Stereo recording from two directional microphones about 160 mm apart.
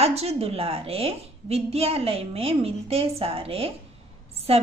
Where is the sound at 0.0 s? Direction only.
40° right (ahead or behind).